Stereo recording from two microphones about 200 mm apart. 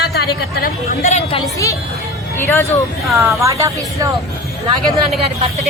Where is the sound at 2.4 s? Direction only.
10° left (ahead or behind).